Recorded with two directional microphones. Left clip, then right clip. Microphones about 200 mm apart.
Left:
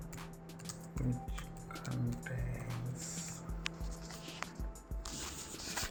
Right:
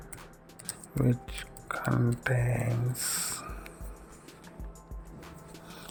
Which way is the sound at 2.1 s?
40° right (ahead or behind).